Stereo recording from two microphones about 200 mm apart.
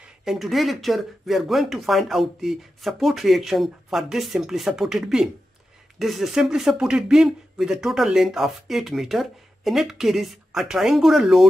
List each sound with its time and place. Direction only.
0.2 s speech: centre (ahead or behind)